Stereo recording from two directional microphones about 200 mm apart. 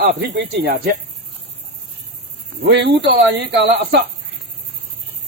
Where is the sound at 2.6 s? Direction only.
55° right (ahead or behind).